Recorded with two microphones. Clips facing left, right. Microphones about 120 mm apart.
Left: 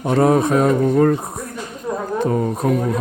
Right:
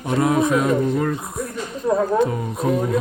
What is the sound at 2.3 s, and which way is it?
Speech, 45° left (ahead or behind).